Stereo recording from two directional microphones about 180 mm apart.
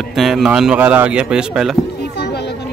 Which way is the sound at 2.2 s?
70° left (ahead or behind).